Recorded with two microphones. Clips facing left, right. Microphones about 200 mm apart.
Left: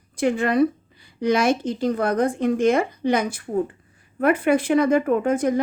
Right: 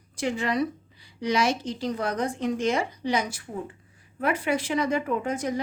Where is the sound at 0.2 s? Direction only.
55° left (ahead or behind).